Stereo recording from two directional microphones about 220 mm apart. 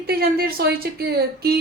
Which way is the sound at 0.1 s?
45° right (ahead or behind).